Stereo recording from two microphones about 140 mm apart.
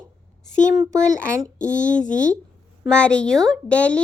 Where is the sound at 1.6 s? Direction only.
60° left (ahead or behind).